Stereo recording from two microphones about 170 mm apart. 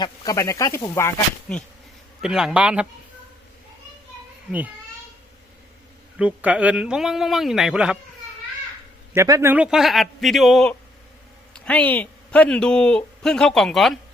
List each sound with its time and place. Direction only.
0.0 s speech: 20° left (ahead or behind)
2.2 s a man's voice: 5° right (ahead or behind)
6.1 s speech: 10° right (ahead or behind)
9.1 s speech: 15° right (ahead or behind); by 14.0 s centre (ahead or behind)